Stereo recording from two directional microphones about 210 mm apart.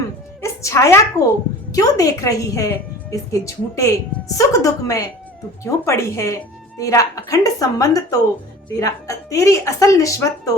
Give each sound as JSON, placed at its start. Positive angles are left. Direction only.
{"t": 0.4, "sound": "music", "side_deg": 15}
{"t": 1.2, "sound": "a woman's voice", "side_deg": 15}